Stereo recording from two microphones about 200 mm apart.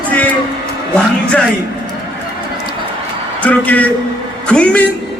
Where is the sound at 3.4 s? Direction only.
10° left (ahead or behind).